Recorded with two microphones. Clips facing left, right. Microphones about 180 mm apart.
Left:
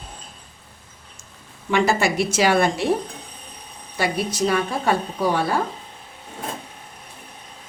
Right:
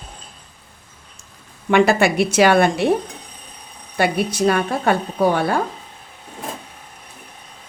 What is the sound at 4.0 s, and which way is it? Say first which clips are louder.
A woman's voice: right 4 dB; 55° right (ahead or behind).